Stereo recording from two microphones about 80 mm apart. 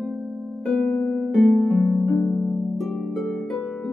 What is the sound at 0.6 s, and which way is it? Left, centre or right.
Music, centre.